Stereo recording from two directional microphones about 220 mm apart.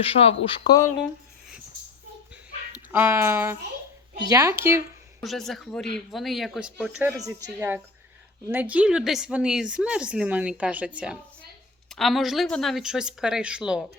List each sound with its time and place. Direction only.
0.0 s speech: 25° left (ahead or behind)
2.9 s speech: 10° right (ahead or behind)
5.2 s speech: centre (ahead or behind)